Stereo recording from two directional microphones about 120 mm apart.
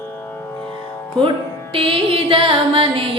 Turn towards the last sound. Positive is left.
turn(degrees=-50)  # may be behind; listen again after turning